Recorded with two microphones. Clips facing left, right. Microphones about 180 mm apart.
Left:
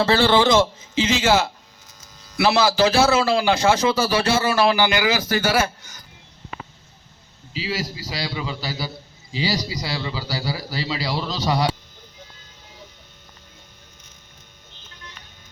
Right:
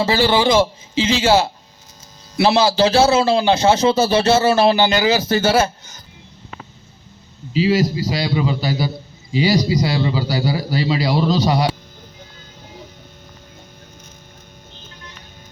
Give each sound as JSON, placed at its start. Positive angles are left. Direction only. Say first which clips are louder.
{"t": 0.0, "sound": "a man's voice", "louder": "right 1 dB", "side_deg": -10}
{"t": 2.3, "sound": "a man's voice", "louder": "right 3 dB", "side_deg": -25}
{"t": 7.5, "sound": "a man's voice", "louder": "right 12 dB", "side_deg": -20}